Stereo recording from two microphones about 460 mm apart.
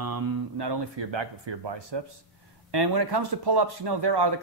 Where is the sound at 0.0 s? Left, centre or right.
Right.